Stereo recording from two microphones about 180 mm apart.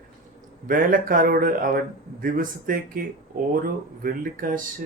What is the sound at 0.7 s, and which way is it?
Speech, 50° right (ahead or behind).